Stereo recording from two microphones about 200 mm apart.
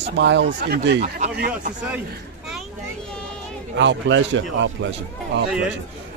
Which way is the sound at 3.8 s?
65° right (ahead or behind).